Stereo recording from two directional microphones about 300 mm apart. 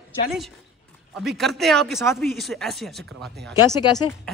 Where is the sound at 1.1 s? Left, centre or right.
Centre.